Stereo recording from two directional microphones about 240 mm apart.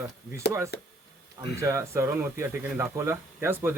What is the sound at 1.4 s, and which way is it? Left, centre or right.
A man's voice, centre.